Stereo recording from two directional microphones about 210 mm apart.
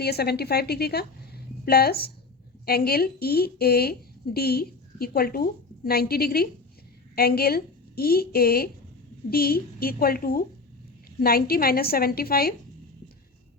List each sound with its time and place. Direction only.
0.0 s a woman's voice: 50° left (ahead or behind)